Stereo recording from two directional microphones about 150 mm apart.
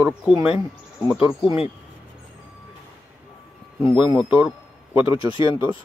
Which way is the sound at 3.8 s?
10° right (ahead or behind).